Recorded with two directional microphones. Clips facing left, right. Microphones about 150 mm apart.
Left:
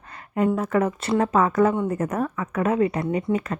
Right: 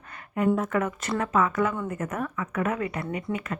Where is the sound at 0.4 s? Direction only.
30° left (ahead or behind).